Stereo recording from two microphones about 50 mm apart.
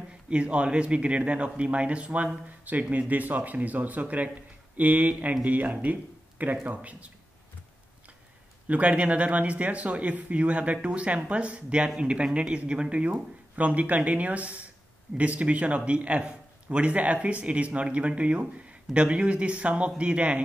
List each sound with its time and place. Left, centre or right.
0.3 s speech: right
8.6 s speech: right